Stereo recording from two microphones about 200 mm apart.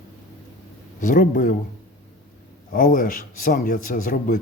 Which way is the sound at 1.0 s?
40° left (ahead or behind).